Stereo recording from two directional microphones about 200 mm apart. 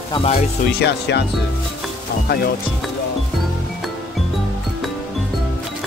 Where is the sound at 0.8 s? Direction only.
55° left (ahead or behind).